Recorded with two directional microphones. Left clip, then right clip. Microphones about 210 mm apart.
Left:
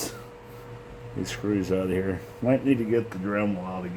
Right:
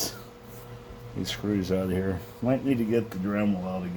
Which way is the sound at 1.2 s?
50° right (ahead or behind).